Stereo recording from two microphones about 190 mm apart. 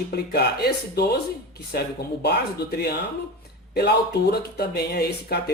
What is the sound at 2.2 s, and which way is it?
Speech, 60° left (ahead or behind).